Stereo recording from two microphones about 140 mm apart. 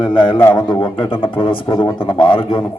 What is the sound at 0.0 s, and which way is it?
Speech, 35° left (ahead or behind).